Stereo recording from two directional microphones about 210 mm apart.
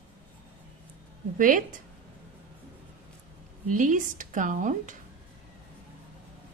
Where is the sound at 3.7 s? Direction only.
40° right (ahead or behind).